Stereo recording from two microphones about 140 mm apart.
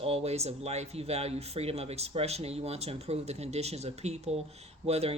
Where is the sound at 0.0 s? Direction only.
45° right (ahead or behind).